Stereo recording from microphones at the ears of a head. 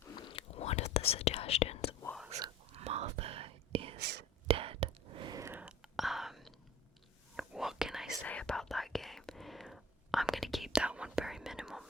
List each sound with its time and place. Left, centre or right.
0.0 s whispering: left
2.3 s whispering: right
5.8 s whispering: centre